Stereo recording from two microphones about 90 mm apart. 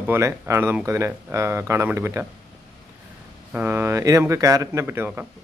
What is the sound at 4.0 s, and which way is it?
Speech, 35° right (ahead or behind).